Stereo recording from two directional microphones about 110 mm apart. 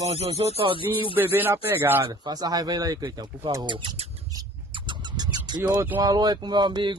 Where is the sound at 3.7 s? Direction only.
50° right (ahead or behind).